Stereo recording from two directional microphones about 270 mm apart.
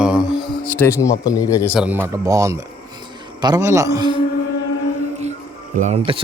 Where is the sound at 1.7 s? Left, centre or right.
Centre.